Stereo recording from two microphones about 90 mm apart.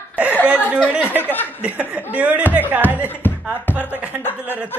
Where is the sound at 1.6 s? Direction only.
15° right (ahead or behind).